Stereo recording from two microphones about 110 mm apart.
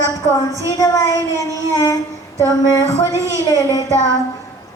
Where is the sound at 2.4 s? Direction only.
35° left (ahead or behind).